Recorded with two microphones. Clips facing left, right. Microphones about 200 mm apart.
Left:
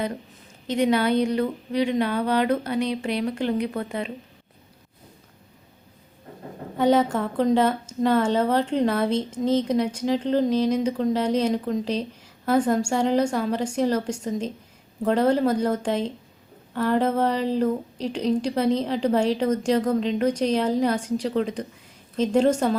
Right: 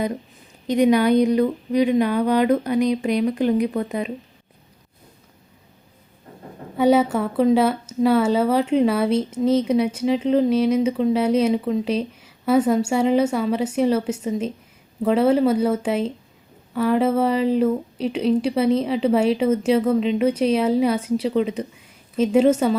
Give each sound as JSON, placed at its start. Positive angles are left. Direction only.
{"t": 0.7, "sound": "a woman's voice", "side_deg": -15}
{"t": 6.7, "sound": "a woman's voice", "side_deg": -10}